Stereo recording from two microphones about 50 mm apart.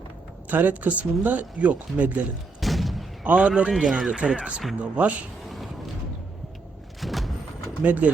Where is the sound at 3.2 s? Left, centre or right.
Right.